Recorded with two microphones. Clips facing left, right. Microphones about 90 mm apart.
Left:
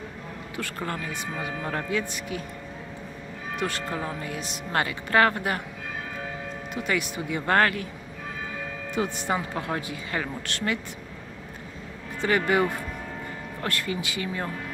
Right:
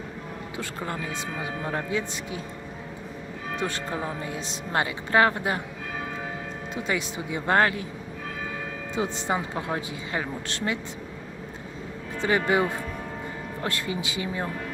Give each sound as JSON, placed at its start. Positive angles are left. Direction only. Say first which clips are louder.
{"t": 0.5, "sound": "speech", "louder": "left 1 dB", "side_deg": -15}
{"t": 3.6, "sound": "speech", "louder": "left 1 dB", "side_deg": -30}
{"t": 6.8, "sound": "speech", "louder": "left 2 dB", "side_deg": -20}
{"t": 9.0, "sound": "speech", "louder": "even", "side_deg": -20}
{"t": 12.2, "sound": "speech", "louder": "even", "side_deg": -20}